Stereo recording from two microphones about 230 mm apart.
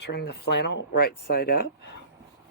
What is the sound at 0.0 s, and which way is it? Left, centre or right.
Speech, left.